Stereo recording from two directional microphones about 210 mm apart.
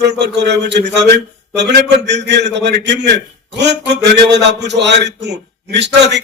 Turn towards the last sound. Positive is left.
turn(degrees=-55)  # may be behind; listen again after turning